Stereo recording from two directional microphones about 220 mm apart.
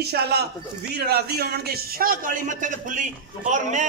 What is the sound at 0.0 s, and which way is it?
A man's voice, 45° right (ahead or behind).